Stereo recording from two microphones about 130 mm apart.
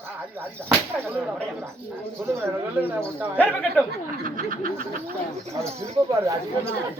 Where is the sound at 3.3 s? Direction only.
10° left (ahead or behind).